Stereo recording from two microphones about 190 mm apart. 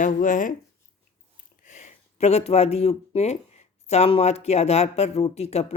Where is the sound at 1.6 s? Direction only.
40° left (ahead or behind).